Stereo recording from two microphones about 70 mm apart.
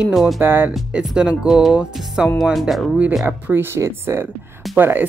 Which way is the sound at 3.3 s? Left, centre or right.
Right.